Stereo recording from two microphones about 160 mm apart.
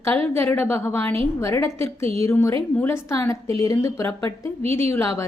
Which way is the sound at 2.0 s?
35° right (ahead or behind).